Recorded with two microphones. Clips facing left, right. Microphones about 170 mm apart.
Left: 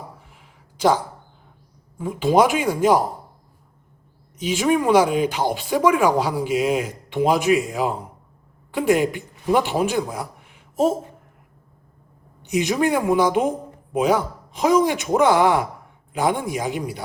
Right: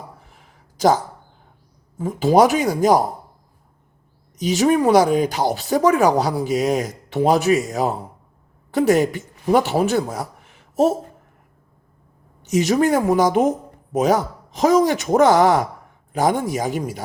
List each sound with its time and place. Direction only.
0.3 s a sound: 40° right (ahead or behind)
2.0 s speech: 40° right (ahead or behind)
4.4 s speech: 40° right (ahead or behind)
12.5 s speech: 40° right (ahead or behind)